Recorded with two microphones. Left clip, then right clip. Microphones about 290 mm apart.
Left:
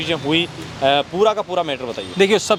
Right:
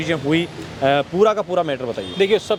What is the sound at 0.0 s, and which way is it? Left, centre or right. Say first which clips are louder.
Speech: left 1 dB; centre.